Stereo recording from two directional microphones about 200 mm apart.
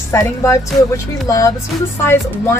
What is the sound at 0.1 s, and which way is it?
Speech, 15° left (ahead or behind).